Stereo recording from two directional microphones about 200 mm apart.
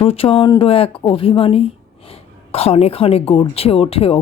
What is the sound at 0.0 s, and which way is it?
Speech, 30° left (ahead or behind).